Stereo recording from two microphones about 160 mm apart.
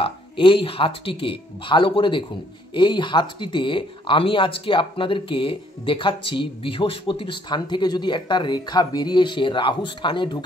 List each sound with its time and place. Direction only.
0.0 s speech: 30° left (ahead or behind)